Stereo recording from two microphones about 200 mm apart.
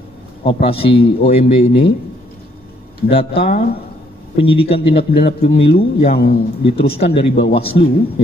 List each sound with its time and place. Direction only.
0.5 s a man's voice: 30° left (ahead or behind)
3.1 s a man's voice: 30° left (ahead or behind)
6.1 s a man's voice: 50° left (ahead or behind)
6.6 s a man's voice: 30° left (ahead or behind)